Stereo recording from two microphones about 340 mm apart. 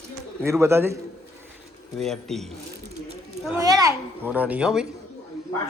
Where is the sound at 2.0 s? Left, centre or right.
Centre.